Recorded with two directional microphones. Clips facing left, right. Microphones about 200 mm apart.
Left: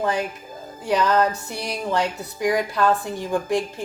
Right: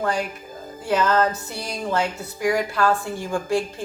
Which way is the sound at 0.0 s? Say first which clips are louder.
Left 1 dB; 20° left (ahead or behind).